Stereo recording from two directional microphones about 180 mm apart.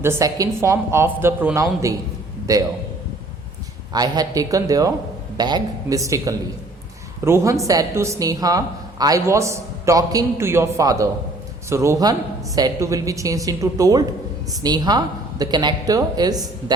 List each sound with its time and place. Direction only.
0.0 s a woman's voice: 15° right (ahead or behind)
3.9 s a woman's voice: 20° right (ahead or behind)